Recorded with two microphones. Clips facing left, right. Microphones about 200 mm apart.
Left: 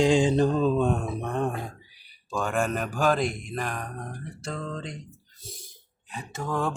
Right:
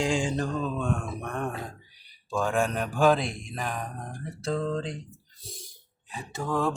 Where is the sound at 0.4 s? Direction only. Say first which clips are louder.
Left 7 dB; 35° left (ahead or behind).